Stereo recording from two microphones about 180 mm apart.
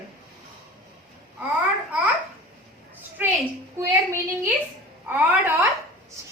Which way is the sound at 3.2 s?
10° right (ahead or behind).